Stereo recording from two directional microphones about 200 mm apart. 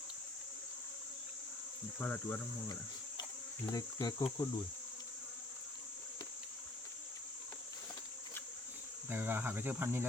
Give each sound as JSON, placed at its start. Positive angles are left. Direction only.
{"t": 2.0, "sound": "speech", "side_deg": 10}
{"t": 9.0, "sound": "speech", "side_deg": -10}